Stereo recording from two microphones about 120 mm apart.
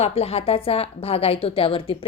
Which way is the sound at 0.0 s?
60° left (ahead or behind).